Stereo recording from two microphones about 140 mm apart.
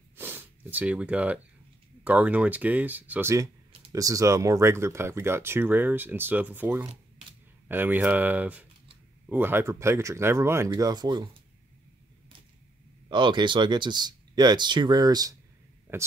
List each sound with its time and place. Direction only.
0.1 s snort: 15° right (ahead or behind)
2.0 s speech: 10° right (ahead or behind); by 11.2 s 30° right (ahead or behind)
13.1 s speech: 35° right (ahead or behind)
15.9 s speech: 15° right (ahead or behind)